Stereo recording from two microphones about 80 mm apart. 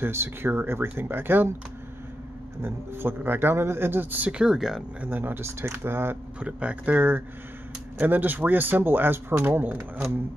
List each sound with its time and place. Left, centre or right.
0.0 s speech: right
2.6 s speech: right; by 4.8 s centre
5.0 s speech: right
6.4 s speech: centre